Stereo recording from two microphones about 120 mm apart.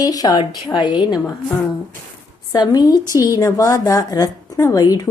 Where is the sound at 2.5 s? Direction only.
35° left (ahead or behind).